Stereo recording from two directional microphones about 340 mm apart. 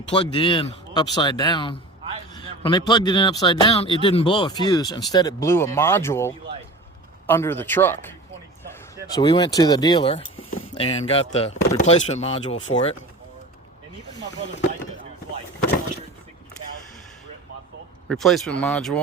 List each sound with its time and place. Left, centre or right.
0.1 s speech: centre
9.1 s speech: centre
18.1 s speech: centre